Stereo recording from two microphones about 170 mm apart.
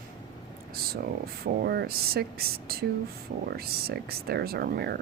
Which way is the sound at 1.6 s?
65° right (ahead or behind).